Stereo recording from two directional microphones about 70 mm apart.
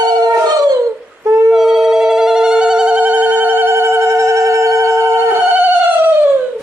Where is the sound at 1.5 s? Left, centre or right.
Centre; by 5.1 s right.